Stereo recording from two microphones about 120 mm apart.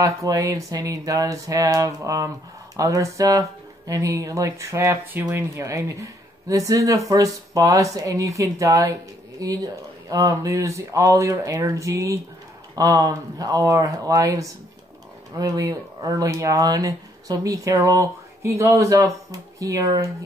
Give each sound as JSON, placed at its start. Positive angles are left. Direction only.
{"t": 0.0, "sound": "speech", "side_deg": -30}